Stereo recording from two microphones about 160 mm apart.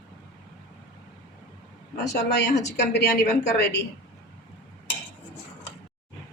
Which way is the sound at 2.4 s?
90° left.